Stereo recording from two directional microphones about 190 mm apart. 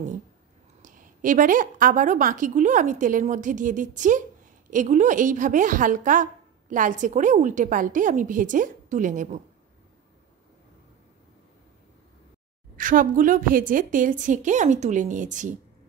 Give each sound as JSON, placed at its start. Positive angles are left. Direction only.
{"t": 0.8, "sound": "a woman's voice", "side_deg": -45}
{"t": 12.7, "sound": "a woman's voice", "side_deg": -45}